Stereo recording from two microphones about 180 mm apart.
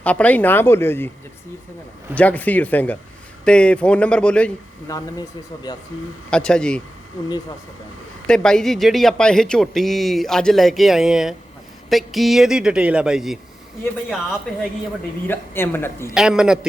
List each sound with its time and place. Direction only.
0.0 s speech: 10° left (ahead or behind)
2.1 s speech: 10° left (ahead or behind)
4.9 s speech: 20° left (ahead or behind)
6.3 s speech: 5° left (ahead or behind)
8.3 s speech: 5° left (ahead or behind)
15.3 s speech: 10° left (ahead or behind)
16.1 s speech: 5° right (ahead or behind)